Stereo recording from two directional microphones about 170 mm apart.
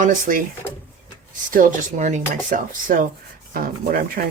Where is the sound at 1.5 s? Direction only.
50° right (ahead or behind).